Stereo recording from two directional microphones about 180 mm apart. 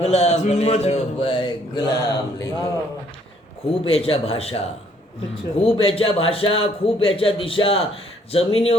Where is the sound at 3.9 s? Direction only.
30° left (ahead or behind).